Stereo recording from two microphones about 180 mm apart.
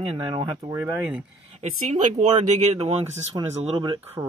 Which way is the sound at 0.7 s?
15° right (ahead or behind).